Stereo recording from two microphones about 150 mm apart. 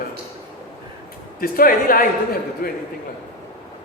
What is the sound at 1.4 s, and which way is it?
Speech, 70° left (ahead or behind).